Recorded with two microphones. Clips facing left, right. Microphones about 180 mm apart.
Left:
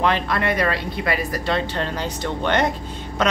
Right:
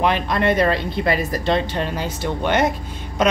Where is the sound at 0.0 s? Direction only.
20° right (ahead or behind).